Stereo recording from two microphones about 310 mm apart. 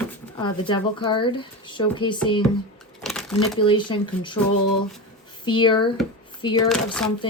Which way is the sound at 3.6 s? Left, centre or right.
Centre.